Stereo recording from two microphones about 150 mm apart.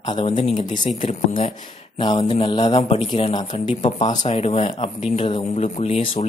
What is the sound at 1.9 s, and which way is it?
Mantra, 35° left (ahead or behind).